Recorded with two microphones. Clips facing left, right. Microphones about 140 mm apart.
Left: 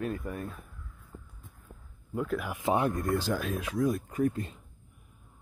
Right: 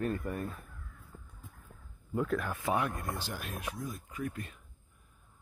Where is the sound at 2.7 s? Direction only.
30° left (ahead or behind).